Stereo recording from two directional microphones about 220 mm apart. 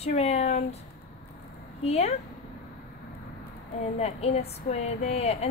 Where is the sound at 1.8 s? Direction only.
30° left (ahead or behind).